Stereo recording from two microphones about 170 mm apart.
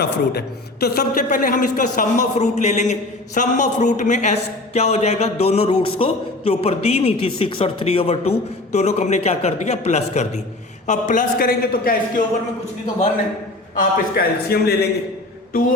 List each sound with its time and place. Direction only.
0.0 s a woman's voice: 70° left (ahead or behind)
13.7 s a man's voice: 65° left (ahead or behind)